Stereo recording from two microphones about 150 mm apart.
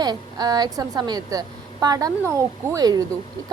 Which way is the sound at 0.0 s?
25° right (ahead or behind).